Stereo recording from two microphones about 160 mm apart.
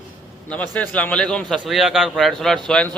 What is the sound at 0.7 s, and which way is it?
A man's voice, 10° left (ahead or behind).